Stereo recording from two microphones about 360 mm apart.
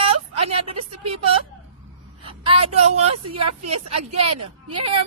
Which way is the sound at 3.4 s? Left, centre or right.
Right.